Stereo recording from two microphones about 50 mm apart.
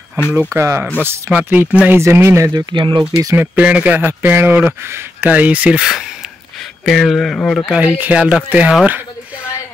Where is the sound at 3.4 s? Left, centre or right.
Right.